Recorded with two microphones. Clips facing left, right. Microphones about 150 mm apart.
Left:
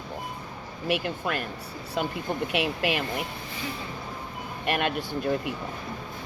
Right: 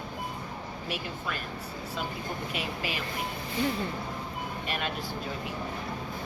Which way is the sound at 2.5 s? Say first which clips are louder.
Left 7 dB; 65° left (ahead or behind).